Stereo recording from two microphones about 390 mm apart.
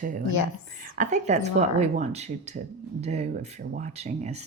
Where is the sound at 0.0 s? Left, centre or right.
Centre.